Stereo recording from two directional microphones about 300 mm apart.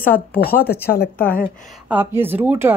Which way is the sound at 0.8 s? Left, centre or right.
Left.